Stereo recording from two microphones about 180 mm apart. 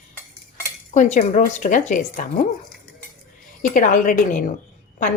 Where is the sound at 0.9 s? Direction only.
40° left (ahead or behind).